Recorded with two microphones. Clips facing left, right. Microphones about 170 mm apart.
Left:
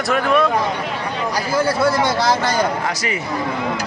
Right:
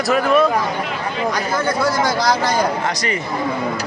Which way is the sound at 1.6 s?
25° left (ahead or behind).